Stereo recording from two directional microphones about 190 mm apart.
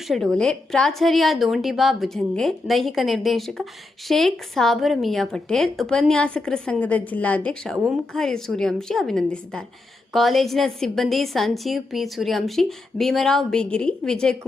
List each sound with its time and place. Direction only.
0.1 s a woman's voice: centre (ahead or behind)